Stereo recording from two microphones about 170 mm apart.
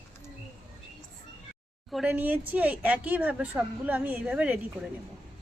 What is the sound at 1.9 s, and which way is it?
Speech, 5° right (ahead or behind).